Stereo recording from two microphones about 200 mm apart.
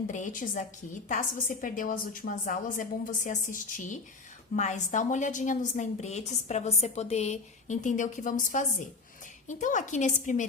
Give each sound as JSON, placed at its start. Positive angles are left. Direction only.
{"t": 0.1, "sound": "a woman's voice", "side_deg": 40}